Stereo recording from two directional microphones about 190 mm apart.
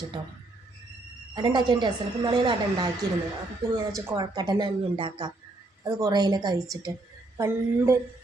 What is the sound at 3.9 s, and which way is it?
A woman's voice, 20° right (ahead or behind).